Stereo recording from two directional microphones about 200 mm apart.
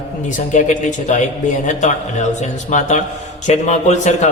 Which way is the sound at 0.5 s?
40° left (ahead or behind).